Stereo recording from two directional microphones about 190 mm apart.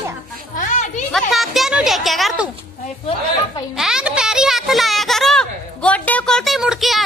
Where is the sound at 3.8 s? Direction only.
5° right (ahead or behind).